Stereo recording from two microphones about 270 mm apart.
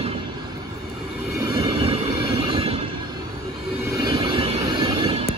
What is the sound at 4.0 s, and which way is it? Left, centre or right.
Train, centre.